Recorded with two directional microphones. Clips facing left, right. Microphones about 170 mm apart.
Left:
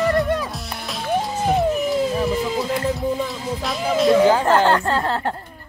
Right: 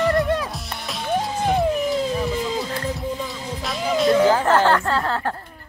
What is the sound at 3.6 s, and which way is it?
Music, centre (ahead or behind).